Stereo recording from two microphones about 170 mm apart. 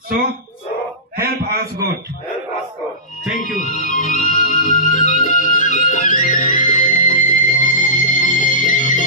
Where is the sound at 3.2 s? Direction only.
50° left (ahead or behind).